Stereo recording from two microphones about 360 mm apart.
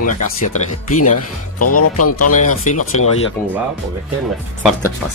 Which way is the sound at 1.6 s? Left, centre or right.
Left.